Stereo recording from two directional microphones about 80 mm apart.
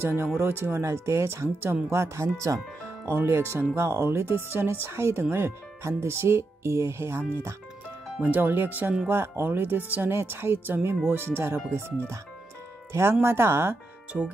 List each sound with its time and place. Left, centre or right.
0.0 s speech: right
12.9 s speech: right
14.1 s speech: centre